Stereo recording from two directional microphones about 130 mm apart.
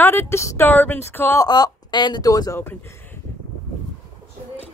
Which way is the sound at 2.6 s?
20° left (ahead or behind).